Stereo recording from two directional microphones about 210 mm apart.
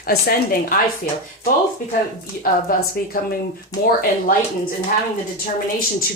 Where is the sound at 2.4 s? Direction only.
45° left (ahead or behind).